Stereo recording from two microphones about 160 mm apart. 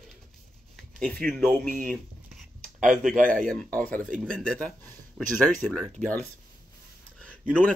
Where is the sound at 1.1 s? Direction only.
5° left (ahead or behind).